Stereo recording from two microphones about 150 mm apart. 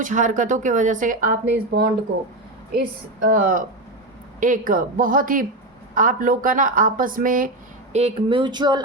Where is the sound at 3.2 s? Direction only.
70° right (ahead or behind).